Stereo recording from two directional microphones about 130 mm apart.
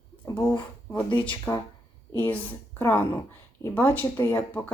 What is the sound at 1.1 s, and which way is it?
Speech, 40° left (ahead or behind).